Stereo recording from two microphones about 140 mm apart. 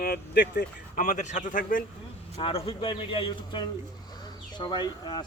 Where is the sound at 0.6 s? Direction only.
70° left (ahead or behind).